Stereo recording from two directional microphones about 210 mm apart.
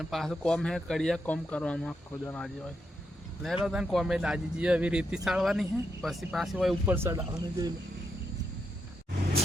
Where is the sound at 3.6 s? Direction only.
5° right (ahead or behind).